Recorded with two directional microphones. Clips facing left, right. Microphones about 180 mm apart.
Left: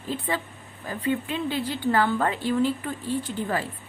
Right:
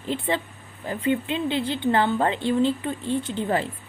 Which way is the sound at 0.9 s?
25° right (ahead or behind).